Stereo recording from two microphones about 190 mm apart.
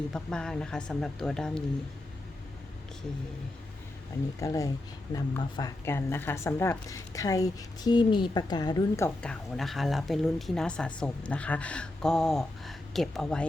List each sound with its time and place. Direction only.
0.1 s speech: 5° left (ahead or behind)
4.4 s a woman's voice: 15° left (ahead or behind)
9.0 s speech: 5° left (ahead or behind)